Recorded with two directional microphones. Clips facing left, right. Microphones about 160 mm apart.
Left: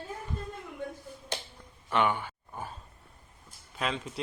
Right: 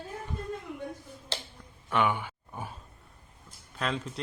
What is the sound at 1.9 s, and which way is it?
Speech, centre (ahead or behind).